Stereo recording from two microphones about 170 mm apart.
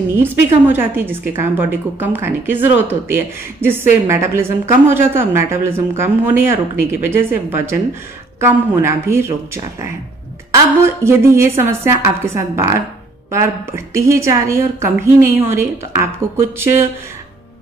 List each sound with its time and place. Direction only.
0.1 s a woman's voice: 10° right (ahead or behind)
11.1 s a woman's voice: 15° right (ahead or behind)